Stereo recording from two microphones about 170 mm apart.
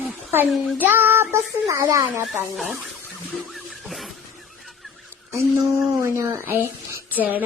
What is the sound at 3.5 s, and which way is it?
Music, centre (ahead or behind).